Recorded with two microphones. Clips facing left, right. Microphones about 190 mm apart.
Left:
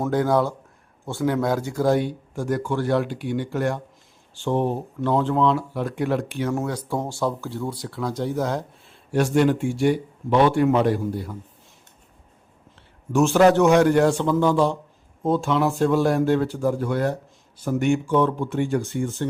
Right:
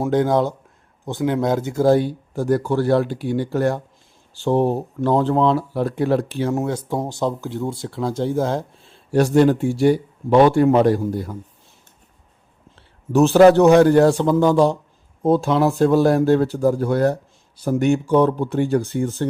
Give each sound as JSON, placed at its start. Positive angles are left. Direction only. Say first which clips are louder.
{"t": 0.1, "sound": "speech", "louder": "right 3 dB", "side_deg": -20}
{"t": 6.5, "sound": "speech", "louder": "right 2 dB", "side_deg": -20}
{"t": 13.1, "sound": "speech", "louder": "right 5 dB", "side_deg": -35}